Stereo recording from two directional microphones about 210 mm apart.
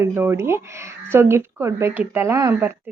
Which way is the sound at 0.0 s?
10° right (ahead or behind).